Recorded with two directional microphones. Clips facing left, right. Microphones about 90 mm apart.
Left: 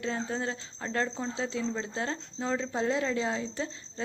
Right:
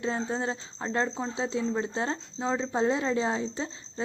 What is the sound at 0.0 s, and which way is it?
Speech, 25° right (ahead or behind).